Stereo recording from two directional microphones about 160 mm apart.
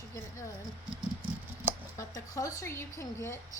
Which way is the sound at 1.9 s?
20° left (ahead or behind).